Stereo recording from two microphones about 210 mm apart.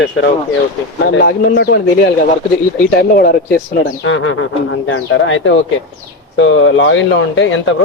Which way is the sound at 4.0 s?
65° left (ahead or behind).